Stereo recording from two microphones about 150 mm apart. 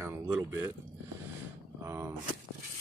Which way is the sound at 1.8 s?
15° right (ahead or behind).